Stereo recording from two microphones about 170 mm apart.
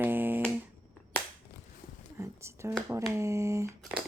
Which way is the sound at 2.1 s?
15° right (ahead or behind).